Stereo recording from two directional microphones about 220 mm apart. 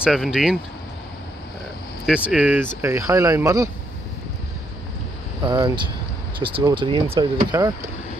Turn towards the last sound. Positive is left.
turn(degrees=-20)  # may be behind; listen again after turning